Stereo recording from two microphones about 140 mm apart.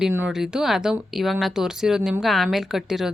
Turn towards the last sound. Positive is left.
turn(degrees=0)  # may be behind; listen again after turning